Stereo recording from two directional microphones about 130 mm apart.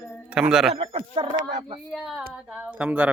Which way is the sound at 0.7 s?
50° right (ahead or behind).